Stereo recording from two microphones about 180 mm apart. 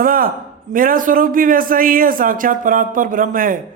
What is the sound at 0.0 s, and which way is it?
A man's voice, 50° right (ahead or behind).